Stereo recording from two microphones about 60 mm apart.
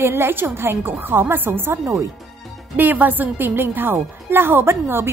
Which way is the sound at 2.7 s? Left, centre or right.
Right.